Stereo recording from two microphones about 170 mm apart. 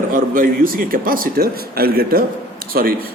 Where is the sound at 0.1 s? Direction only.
55° right (ahead or behind).